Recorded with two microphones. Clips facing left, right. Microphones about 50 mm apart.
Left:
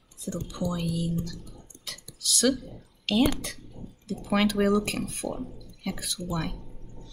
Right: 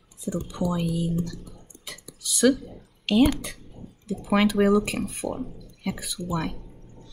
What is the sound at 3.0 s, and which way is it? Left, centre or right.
Speech, centre.